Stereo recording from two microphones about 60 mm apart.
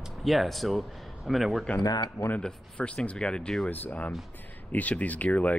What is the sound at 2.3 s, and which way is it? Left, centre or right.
Speech, centre.